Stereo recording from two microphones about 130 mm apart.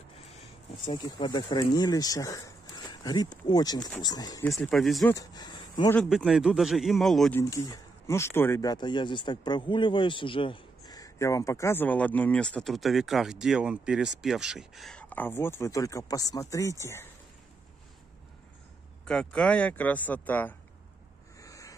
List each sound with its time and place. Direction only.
0.8 s speech: 35° left (ahead or behind)
4.5 s a man's voice: centre (ahead or behind)
5.1 s speech: 30° left (ahead or behind)
6.0 s a man's voice: 5° right (ahead or behind)
7.3 s speech: 25° left (ahead or behind)
8.6 s speech: 35° left (ahead or behind)
19.0 s speech: 5° left (ahead or behind)
21.4 s a sound: 25° left (ahead or behind)